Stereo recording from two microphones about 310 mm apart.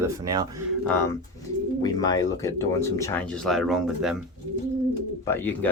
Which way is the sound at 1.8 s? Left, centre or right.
Centre.